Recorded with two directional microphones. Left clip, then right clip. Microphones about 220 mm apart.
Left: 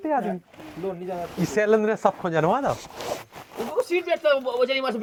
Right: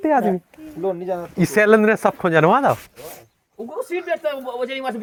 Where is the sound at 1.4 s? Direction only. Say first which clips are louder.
Right 7 dB; 50° right (ahead or behind).